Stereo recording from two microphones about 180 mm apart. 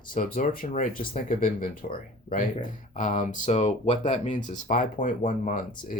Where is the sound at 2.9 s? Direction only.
45° left (ahead or behind).